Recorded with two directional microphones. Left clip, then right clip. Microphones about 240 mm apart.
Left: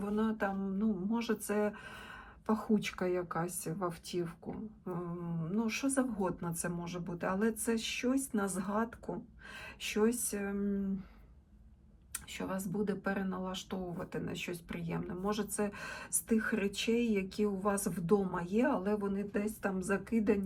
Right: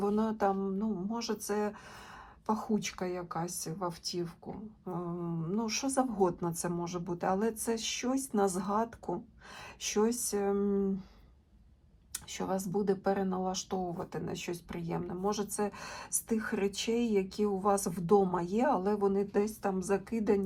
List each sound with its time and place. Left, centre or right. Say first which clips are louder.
0.0 s speech: right 5 dB; centre
12.7 s speech: right 6 dB; centre